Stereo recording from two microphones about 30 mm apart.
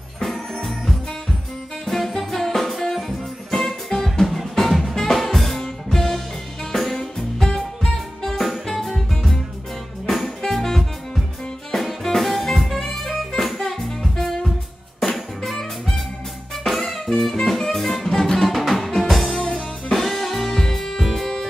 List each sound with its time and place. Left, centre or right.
1.9 s music: centre
5.1 s drum kit: centre
5.6 s music: centre
12.2 s jazz: centre
12.7 s saxophone: centre
13.4 s music: centre
18.5 s music: centre